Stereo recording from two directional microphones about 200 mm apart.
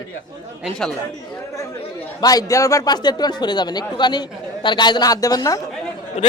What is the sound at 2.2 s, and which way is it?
A man's voice, 20° left (ahead or behind).